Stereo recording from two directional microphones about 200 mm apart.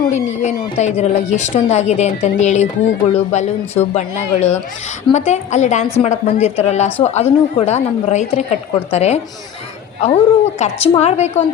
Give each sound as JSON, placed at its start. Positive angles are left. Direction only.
{"t": 0.1, "sound": "speech", "side_deg": 35}